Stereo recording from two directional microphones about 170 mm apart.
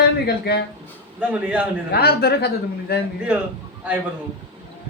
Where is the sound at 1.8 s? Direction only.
70° left (ahead or behind).